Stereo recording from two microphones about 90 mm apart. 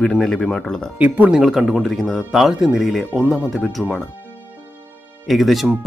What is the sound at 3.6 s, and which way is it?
Speech, 5° left (ahead or behind).